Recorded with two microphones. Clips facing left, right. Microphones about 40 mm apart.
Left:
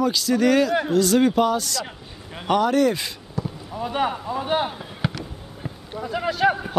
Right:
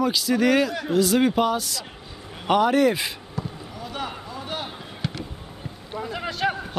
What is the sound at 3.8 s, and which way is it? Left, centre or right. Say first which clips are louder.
Vehicle: left 9 dB; left.